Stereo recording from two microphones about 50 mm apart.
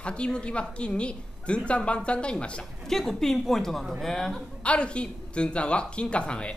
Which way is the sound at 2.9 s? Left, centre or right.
Centre.